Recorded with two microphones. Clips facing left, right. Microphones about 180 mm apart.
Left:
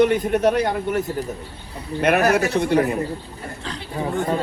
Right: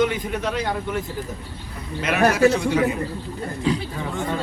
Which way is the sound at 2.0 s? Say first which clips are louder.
Even; 60° left (ahead or behind).